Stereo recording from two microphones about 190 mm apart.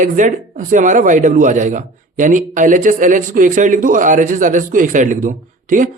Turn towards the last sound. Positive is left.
turn(degrees=-40)  # may be behind; listen again after turning